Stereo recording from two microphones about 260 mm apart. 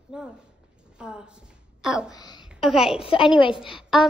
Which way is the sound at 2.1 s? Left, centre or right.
Centre.